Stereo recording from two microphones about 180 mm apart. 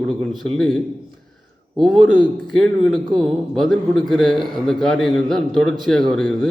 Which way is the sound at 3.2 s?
Centre (ahead or behind).